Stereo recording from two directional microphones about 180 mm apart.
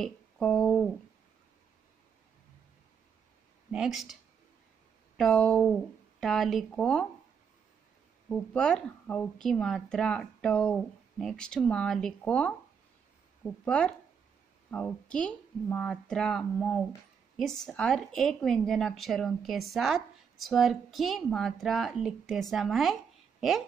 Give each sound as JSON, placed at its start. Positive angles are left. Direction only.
{"t": 0.0, "sound": "a sound", "side_deg": 5}
{"t": 3.7, "sound": "a woman's voice", "side_deg": 0}
{"t": 8.3, "sound": "a woman's voice", "side_deg": 5}